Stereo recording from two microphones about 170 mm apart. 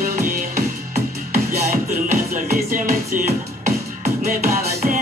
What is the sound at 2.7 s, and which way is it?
Music, 55° right (ahead or behind).